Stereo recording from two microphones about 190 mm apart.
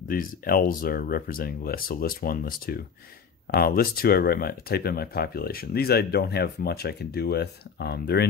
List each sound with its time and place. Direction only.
0.1 s speech: 50° left (ahead or behind)